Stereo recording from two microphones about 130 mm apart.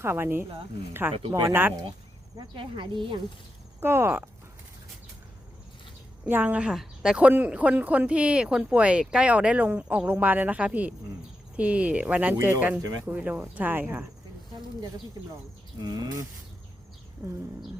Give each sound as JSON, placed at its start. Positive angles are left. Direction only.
{"t": 0.0, "sound": "a woman's voice", "side_deg": -20}
{"t": 2.3, "sound": "speech", "side_deg": -35}
{"t": 3.8, "sound": "speech", "side_deg": -20}
{"t": 6.2, "sound": "a woman's voice", "side_deg": -15}
{"t": 15.8, "sound": "speech", "side_deg": -30}
{"t": 17.2, "sound": "a woman's voice", "side_deg": -15}